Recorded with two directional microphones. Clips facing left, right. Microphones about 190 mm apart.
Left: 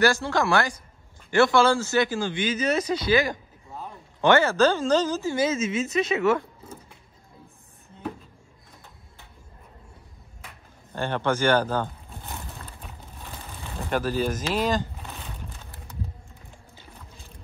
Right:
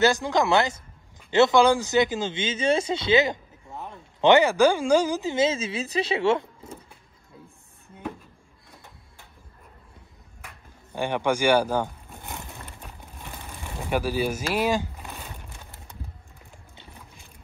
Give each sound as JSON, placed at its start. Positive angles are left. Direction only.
{"t": 0.0, "sound": "speech", "side_deg": -20}
{"t": 10.4, "sound": "vehicle", "side_deg": -10}
{"t": 13.2, "sound": "pigeon", "side_deg": -15}